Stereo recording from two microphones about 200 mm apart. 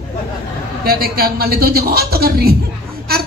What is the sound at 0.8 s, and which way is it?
A man's voice, 50° right (ahead or behind).